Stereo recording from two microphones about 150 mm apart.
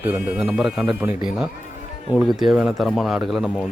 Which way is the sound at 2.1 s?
Centre (ahead or behind).